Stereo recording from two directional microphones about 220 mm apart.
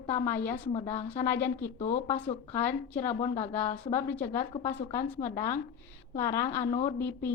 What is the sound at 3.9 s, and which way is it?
A woman's voice, 10° left (ahead or behind).